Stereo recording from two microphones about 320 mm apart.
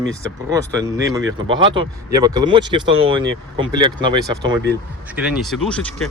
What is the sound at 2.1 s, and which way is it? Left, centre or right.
Speech, centre.